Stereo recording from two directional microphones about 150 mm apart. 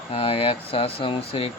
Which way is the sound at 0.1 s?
40° left (ahead or behind).